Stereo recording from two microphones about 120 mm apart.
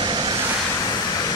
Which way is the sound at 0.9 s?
30° left (ahead or behind).